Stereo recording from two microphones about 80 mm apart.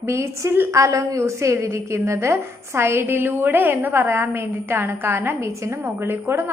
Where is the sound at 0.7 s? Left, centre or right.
Right.